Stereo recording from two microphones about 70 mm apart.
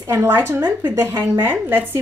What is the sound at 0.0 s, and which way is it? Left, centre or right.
Speech, right.